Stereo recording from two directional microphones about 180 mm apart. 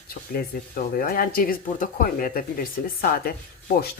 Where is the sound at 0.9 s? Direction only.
50° left (ahead or behind).